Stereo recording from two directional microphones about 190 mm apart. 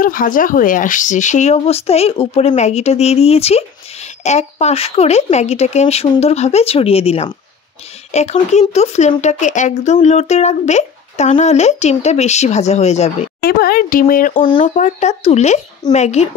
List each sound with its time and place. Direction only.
0.0 s speech: 45° left (ahead or behind)
13.4 s speech: 55° left (ahead or behind)
14.3 s speech: 25° left (ahead or behind)
14.6 s speech: 40° left (ahead or behind)